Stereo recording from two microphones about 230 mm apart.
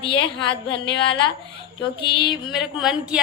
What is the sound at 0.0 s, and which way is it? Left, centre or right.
A woman's voice, left.